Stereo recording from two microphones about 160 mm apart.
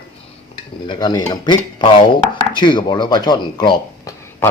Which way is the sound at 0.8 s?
25° left (ahead or behind).